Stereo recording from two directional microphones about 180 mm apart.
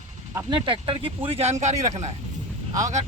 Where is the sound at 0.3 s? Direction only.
25° right (ahead or behind).